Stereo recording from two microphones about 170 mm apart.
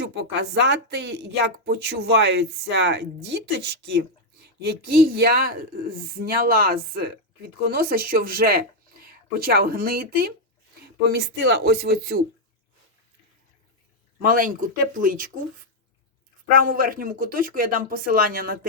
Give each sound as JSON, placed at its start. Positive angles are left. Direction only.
{"t": 0.0, "sound": "speech", "side_deg": -90}
{"t": 11.1, "sound": "speech", "side_deg": -80}
{"t": 14.2, "sound": "speech", "side_deg": -55}
{"t": 16.5, "sound": "speech", "side_deg": -55}